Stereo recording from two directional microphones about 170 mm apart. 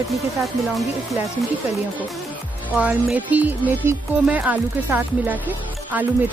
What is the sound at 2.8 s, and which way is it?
Speech, 10° right (ahead or behind).